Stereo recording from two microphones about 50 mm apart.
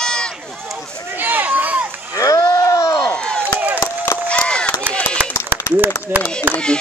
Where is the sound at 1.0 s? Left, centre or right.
Right.